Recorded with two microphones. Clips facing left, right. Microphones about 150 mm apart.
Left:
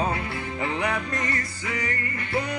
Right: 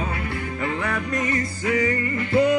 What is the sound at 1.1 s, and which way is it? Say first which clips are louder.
Music: right 5 dB; 20° right (ahead or behind).